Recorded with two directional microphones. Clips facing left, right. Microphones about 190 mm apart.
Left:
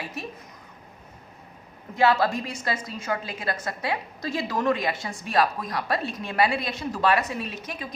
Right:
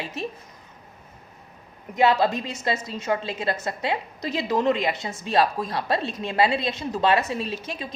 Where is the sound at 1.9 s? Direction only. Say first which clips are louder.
Right 1 dB; 20° right (ahead or behind).